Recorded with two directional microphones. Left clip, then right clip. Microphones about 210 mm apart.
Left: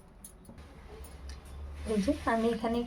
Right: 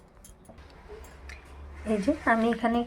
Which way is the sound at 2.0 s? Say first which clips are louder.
Right 5 dB; 20° right (ahead or behind).